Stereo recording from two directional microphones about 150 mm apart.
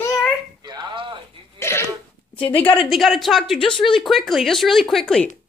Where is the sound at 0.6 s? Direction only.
30° right (ahead or behind).